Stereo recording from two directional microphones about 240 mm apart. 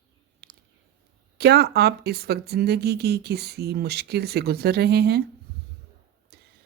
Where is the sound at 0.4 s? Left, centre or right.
Right.